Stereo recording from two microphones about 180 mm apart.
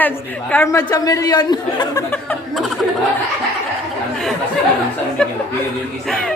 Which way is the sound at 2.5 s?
Centre (ahead or behind).